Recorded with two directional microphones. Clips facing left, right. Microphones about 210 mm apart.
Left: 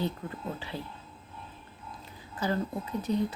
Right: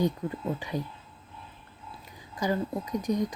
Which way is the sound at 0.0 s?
15° right (ahead or behind).